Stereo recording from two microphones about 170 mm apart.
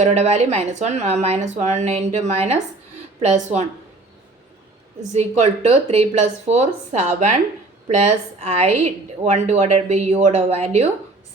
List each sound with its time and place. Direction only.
0.0 s a woman's voice: 40° right (ahead or behind)
5.1 s a woman's voice: 40° right (ahead or behind)